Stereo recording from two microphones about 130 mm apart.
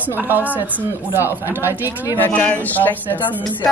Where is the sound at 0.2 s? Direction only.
15° right (ahead or behind).